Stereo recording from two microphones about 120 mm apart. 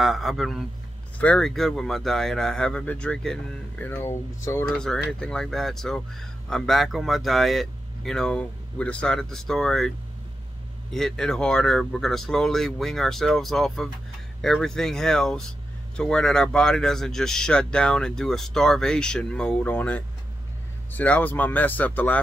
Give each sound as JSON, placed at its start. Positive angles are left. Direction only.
{"t": 0.0, "sound": "speech", "side_deg": 0}
{"t": 1.1, "sound": "speech", "side_deg": 10}
{"t": 4.7, "sound": "speech", "side_deg": 5}